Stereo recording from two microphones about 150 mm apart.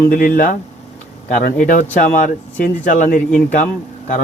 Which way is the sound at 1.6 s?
60° left (ahead or behind).